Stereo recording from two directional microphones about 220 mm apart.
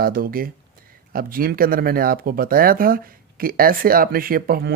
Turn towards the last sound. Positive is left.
turn(degrees=-40)  # may be behind; listen again after turning